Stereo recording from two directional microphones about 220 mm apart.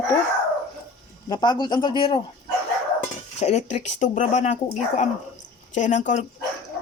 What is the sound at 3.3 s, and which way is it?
Speech, 30° left (ahead or behind).